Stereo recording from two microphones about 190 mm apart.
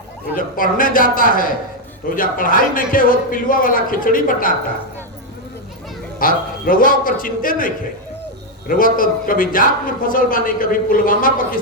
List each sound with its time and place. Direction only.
0.3 s a man's voice: 45° left (ahead or behind)
6.1 s a man's voice: 45° left (ahead or behind)